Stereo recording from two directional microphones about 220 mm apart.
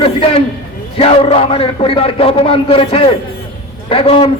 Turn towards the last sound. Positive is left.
turn(degrees=25)  # may be behind; listen again after turning